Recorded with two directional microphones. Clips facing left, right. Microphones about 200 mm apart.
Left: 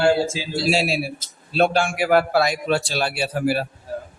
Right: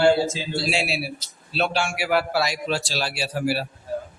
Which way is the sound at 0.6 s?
45° left (ahead or behind).